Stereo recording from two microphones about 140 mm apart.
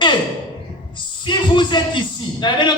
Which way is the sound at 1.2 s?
35° left (ahead or behind).